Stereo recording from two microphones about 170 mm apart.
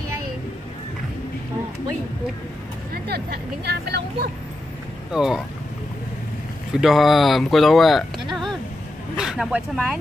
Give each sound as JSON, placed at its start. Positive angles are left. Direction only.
{"t": 2.9, "sound": "speech", "side_deg": -70}
{"t": 5.1, "sound": "speech", "side_deg": -5}
{"t": 6.7, "sound": "speech", "side_deg": 0}
{"t": 9.1, "sound": "speech", "side_deg": -5}